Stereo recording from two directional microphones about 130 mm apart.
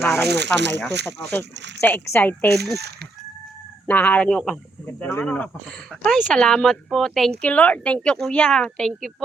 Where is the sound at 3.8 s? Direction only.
15° left (ahead or behind).